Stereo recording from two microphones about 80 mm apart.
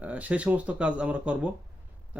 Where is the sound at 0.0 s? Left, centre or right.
Right.